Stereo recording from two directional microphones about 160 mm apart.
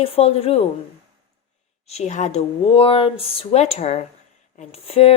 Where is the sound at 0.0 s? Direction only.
40° left (ahead or behind).